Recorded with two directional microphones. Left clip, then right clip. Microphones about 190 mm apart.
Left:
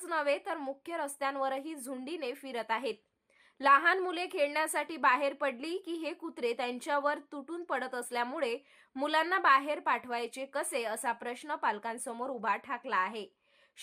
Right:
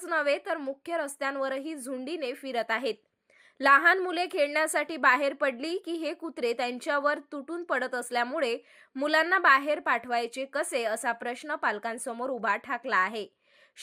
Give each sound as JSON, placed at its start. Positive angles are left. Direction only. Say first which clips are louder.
{"t": 0.0, "sound": "a woman's voice", "louder": "right 4 dB", "side_deg": -15}